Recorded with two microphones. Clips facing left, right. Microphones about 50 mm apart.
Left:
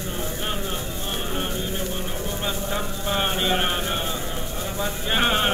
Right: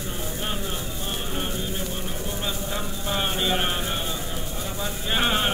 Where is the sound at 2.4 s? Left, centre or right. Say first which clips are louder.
Left 3 dB; centre.